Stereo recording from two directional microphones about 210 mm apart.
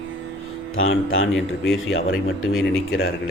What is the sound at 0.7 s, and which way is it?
Speech, 75° left (ahead or behind).